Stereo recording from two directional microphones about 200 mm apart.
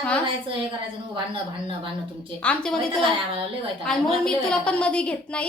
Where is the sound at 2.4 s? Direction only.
5° left (ahead or behind).